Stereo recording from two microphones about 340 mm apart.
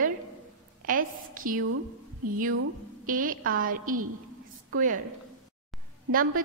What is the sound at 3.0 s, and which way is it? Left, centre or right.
A woman's voice, right.